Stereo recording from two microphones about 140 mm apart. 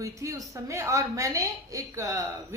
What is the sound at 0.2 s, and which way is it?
A woman's voice, 20° right (ahead or behind).